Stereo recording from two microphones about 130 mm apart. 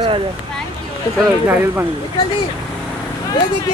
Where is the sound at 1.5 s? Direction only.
15° right (ahead or behind).